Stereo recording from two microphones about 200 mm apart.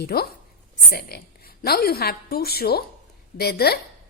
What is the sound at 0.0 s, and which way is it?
A woman's voice, 50° left (ahead or behind).